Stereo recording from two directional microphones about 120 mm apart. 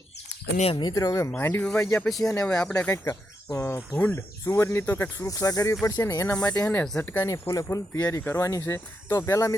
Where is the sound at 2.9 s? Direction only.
25° left (ahead or behind).